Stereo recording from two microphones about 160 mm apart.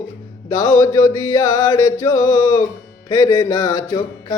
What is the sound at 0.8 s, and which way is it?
Mantra, 20° left (ahead or behind).